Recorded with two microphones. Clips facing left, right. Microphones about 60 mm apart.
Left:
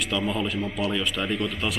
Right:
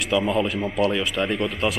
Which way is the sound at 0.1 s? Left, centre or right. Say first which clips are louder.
Right 7 dB; centre.